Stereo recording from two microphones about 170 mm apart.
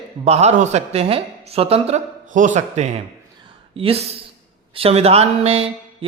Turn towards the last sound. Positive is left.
turn(degrees=-35)  # may be behind; listen again after turning